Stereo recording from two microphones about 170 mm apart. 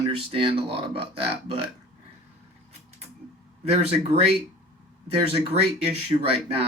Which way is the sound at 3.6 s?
35° right (ahead or behind).